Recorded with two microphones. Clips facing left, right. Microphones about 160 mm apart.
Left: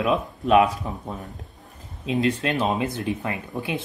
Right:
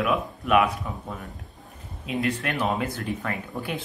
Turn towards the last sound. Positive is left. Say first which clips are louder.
# left 2 dB
turn(degrees=20)  # may be behind; listen again after turning